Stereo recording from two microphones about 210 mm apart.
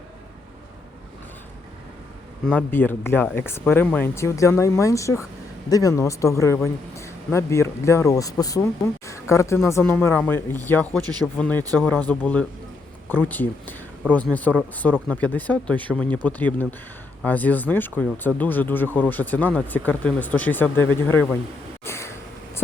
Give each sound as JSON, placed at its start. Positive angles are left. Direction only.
{"t": 2.5, "sound": "speech", "side_deg": 10}
{"t": 11.0, "sound": "speech", "side_deg": -20}
{"t": 11.3, "sound": "speech", "side_deg": 5}
{"t": 21.8, "sound": "a sound", "side_deg": 15}